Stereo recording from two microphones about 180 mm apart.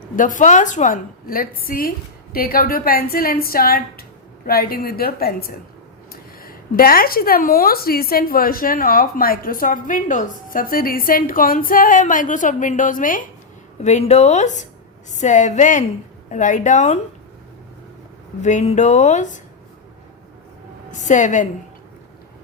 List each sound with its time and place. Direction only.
0.2 s a woman's voice: 45° left (ahead or behind)
18.4 s speech: 40° left (ahead or behind)
21.0 s a woman's voice: 45° left (ahead or behind)